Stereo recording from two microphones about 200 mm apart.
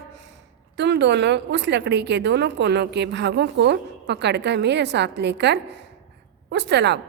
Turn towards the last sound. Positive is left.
turn(degrees=-60)  # may be behind; listen again after turning